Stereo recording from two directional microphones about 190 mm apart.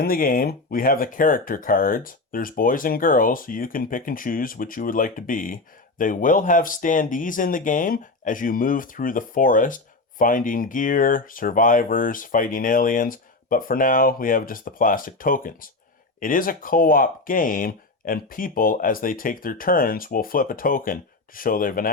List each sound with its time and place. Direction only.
0.0 s speech: 50° left (ahead or behind)